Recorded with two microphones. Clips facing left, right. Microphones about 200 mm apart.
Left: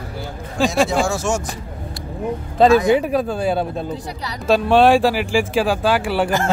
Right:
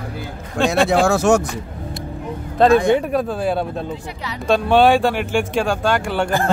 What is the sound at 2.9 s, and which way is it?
Speech, 5° left (ahead or behind).